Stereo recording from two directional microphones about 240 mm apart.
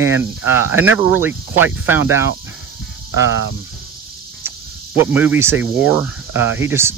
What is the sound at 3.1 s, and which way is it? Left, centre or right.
Speech, left.